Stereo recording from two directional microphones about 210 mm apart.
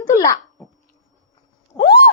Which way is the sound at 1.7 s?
10° left (ahead or behind).